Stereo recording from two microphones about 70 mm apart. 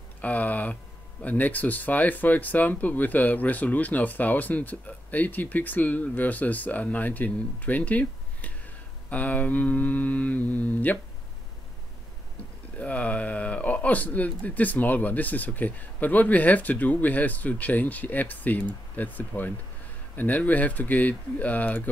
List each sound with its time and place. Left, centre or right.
0.2 s a sound: left
1.2 s speech: left
12.7 s speech: left